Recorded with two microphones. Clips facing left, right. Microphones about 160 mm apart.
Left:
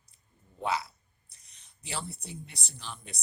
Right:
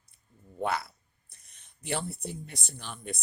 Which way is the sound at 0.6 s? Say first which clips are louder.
Right 1 dB; 55° right (ahead or behind).